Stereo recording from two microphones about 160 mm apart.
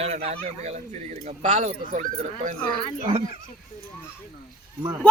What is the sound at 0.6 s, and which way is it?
Speech, 45° right (ahead or behind).